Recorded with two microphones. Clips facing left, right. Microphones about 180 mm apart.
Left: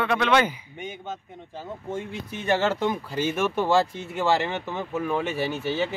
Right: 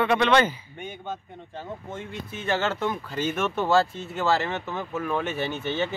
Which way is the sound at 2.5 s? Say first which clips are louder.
Left 3 dB; 15° left (ahead or behind).